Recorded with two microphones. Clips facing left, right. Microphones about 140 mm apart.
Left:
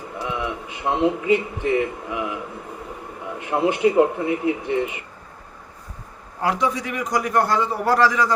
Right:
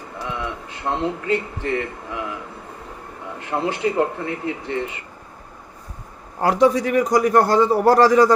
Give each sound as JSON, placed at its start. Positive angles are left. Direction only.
{"t": 0.2, "sound": "a man's voice", "side_deg": 15}
{"t": 6.4, "sound": "a man's voice", "side_deg": -40}